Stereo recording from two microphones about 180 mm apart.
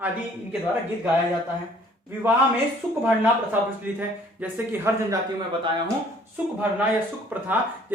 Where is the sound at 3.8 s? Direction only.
10° right (ahead or behind).